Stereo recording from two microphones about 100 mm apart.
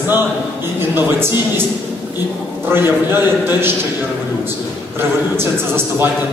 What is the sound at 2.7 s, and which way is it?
A man's voice, 20° right (ahead or behind).